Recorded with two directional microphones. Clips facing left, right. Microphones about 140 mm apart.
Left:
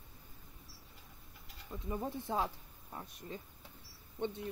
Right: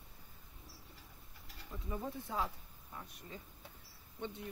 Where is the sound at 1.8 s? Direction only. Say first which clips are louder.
Left 4 dB; 30° left (ahead or behind).